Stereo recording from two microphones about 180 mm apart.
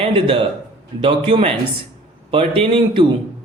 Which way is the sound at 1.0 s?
30° right (ahead or behind).